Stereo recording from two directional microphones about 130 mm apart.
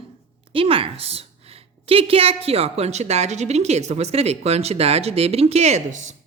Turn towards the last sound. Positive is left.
turn(degrees=-70)  # may be behind; listen again after turning